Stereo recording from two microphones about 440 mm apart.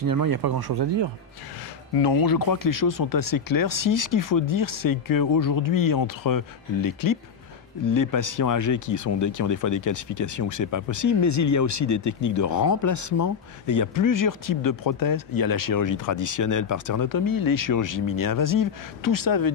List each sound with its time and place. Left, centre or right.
0.0 s speech: right
2.0 s speech: left